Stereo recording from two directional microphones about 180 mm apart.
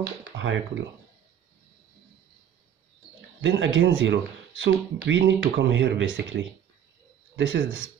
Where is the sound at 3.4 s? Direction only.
90° right.